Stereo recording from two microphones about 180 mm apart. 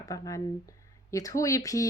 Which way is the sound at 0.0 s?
20° left (ahead or behind).